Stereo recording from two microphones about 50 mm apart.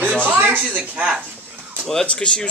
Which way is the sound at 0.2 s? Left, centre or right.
Right.